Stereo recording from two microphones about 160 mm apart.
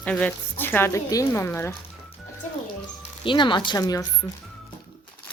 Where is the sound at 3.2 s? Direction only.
30° left (ahead or behind).